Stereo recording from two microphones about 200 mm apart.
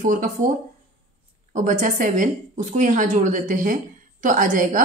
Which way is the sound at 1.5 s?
40° right (ahead or behind).